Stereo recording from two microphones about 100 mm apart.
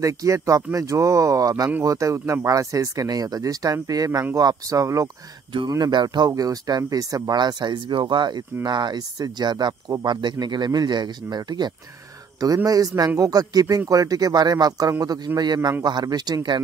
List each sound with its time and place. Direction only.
0.0 s speech: 35° right (ahead or behind)
5.7 s speech: 45° right (ahead or behind)